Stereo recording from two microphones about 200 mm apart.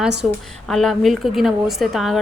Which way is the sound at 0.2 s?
5° right (ahead or behind).